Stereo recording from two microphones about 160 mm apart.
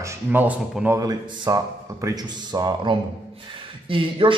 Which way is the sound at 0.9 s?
25° right (ahead or behind).